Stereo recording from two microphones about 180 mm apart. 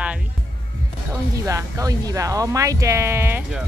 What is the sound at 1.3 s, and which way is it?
Speech, 20° right (ahead or behind).